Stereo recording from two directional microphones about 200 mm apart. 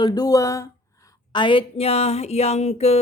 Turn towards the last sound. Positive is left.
turn(degrees=30)  # may be behind; listen again after turning